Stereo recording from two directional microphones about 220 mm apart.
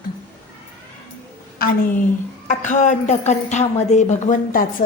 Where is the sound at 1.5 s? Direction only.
40° left (ahead or behind).